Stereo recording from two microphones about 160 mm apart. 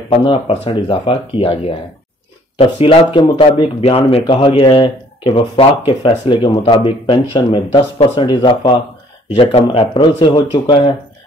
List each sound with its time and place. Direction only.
0.1 s speech: 30° left (ahead or behind)